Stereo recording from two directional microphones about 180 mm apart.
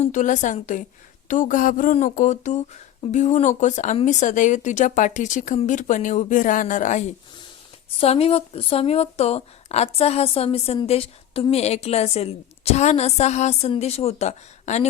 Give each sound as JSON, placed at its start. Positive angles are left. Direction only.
{"t": 0.0, "sound": "a woman's voice", "side_deg": 45}